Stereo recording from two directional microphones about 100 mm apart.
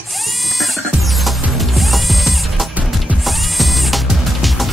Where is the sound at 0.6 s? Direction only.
Centre (ahead or behind).